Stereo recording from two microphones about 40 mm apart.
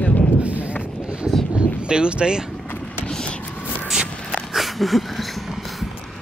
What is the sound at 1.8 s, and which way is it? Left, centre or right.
Speech, right.